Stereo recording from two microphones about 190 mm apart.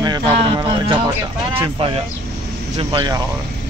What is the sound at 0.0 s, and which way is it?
Music, 25° right (ahead or behind).